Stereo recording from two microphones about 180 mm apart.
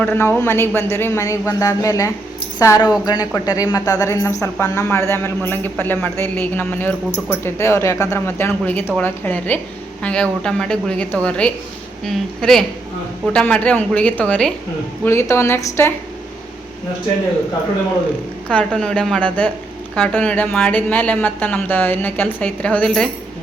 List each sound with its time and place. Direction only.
0.0 s a man's voice: 10° left (ahead or behind)
18.7 s a man's voice: 5° left (ahead or behind)